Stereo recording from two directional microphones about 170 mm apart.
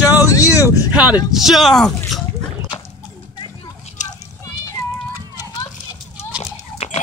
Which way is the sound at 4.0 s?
45° left (ahead or behind).